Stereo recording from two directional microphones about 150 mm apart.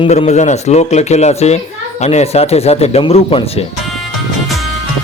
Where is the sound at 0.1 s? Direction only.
50° left (ahead or behind).